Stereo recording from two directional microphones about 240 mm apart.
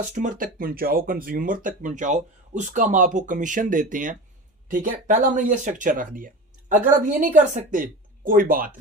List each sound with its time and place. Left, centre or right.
0.0 s speech: right